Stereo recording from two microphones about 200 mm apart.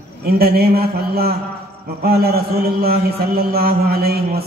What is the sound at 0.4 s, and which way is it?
A man's voice, 50° right (ahead or behind).